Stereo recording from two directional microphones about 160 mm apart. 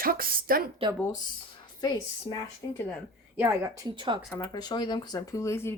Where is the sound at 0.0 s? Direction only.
65° right (ahead or behind).